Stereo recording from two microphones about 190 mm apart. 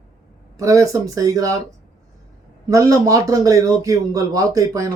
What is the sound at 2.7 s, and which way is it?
Speech, 15° right (ahead or behind).